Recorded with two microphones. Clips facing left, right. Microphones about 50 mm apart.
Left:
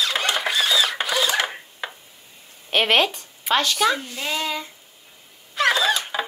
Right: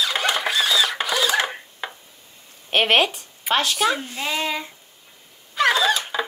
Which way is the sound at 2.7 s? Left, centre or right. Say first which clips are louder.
Right 1 dB; centre.